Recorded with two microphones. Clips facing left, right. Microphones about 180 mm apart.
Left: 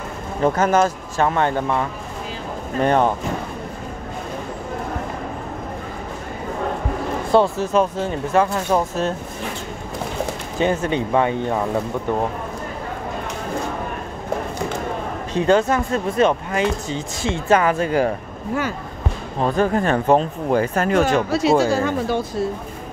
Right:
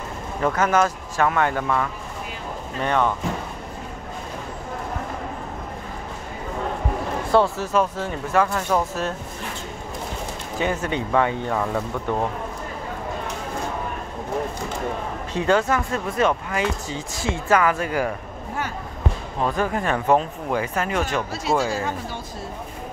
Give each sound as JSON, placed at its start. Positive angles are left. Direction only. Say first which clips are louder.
{"t": 0.4, "sound": "speech", "louder": "left 3 dB", "side_deg": 30}
{"t": 7.2, "sound": "speech", "louder": "left 3 dB", "side_deg": 15}
{"t": 10.6, "sound": "speech", "louder": "left 5 dB", "side_deg": 20}
{"t": 15.3, "sound": "speech", "louder": "left 4 dB", "side_deg": 20}
{"t": 19.4, "sound": "speech", "louder": "left 5 dB", "side_deg": 30}
{"t": 21.3, "sound": "speech", "louder": "left 6 dB", "side_deg": 75}